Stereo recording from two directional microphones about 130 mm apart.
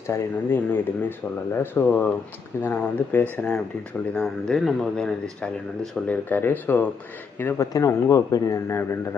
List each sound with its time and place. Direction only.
0.1 s a man's voice: 15° left (ahead or behind)